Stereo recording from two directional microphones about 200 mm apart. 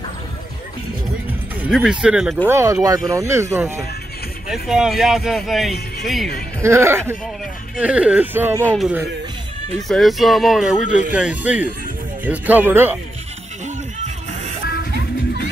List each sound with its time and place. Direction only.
1.6 s speech: 5° right (ahead or behind)
4.5 s speech: centre (ahead or behind)
6.6 s speech: 15° right (ahead or behind)
14.0 s music: 35° right (ahead or behind)
14.7 s music: 55° left (ahead or behind)